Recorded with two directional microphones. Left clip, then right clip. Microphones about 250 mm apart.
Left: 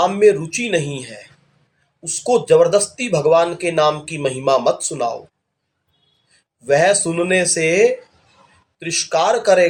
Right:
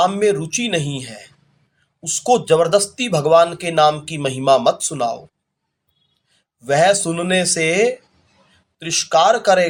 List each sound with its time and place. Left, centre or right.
0.0 s speech: right
6.3 s speech: right